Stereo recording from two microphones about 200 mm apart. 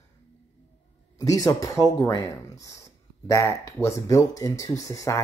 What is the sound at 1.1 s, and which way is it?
Speech, 15° left (ahead or behind).